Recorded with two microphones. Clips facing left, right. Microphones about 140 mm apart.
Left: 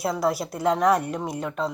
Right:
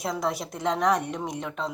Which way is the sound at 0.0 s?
5° left (ahead or behind).